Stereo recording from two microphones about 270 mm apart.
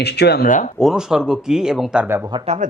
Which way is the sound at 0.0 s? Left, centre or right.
Left.